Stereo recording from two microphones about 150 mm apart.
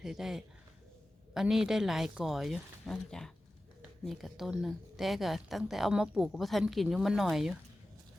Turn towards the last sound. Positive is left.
turn(degrees=0)  # may be behind; listen again after turning